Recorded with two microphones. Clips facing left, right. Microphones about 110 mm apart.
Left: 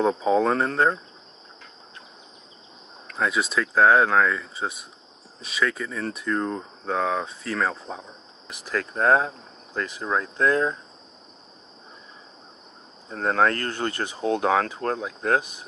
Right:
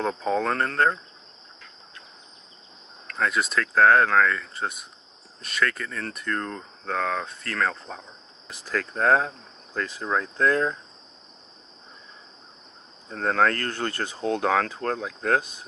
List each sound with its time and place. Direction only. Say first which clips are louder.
0.0 s speech: left 5 dB; 5° left (ahead or behind)
3.1 s speech: left 1 dB; 5° left (ahead or behind)
8.5 s speech: left 1 dB; 15° left (ahead or behind)
13.1 s speech: left 1 dB; 15° left (ahead or behind)